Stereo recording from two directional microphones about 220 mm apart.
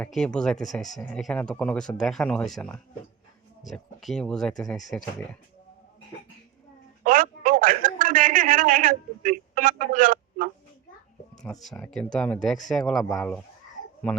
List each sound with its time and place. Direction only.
0.0 s speech: 5° left (ahead or behind)
7.0 s a sound: 40° right (ahead or behind)
11.6 s speech: centre (ahead or behind)